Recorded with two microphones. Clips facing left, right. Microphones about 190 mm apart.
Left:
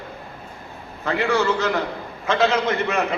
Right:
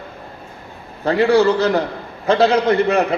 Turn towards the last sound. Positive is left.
turn(degrees=-35)  # may be behind; listen again after turning